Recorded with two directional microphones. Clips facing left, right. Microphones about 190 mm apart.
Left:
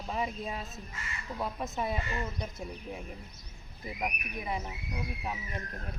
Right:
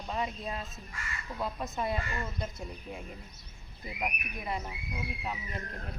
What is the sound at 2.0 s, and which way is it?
Speech, 20° left (ahead or behind).